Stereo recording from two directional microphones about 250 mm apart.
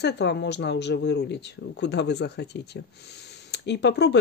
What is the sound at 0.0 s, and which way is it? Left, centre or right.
Speech, left.